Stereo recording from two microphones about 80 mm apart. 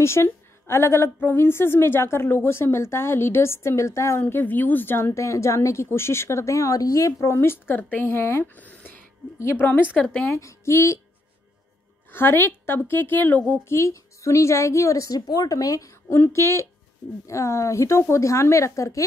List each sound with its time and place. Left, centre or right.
0.0 s a woman's voice: left
4.2 s a woman's voice: left
7.3 s a woman's voice: left
8.5 s a woman's voice: centre
10.3 s a woman's voice: left
12.1 s a woman's voice: left
13.7 s a woman's voice: left
16.1 s a woman's voice: left